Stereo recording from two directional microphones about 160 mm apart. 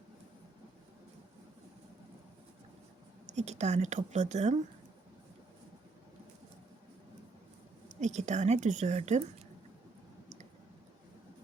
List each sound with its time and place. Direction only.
3.2 s a woman's voice: 45° right (ahead or behind)
7.9 s a woman's voice: 45° right (ahead or behind)